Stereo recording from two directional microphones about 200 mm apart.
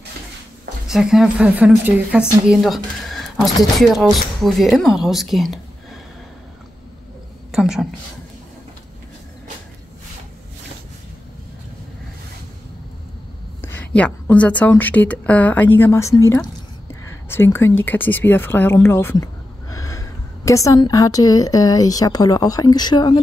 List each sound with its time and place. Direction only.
0.8 s speech: centre (ahead or behind)
7.5 s speech: centre (ahead or behind)
13.6 s a woman's voice: 10° left (ahead or behind)